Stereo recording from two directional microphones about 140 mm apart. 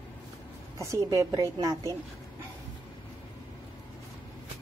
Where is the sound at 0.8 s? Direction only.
20° right (ahead or behind).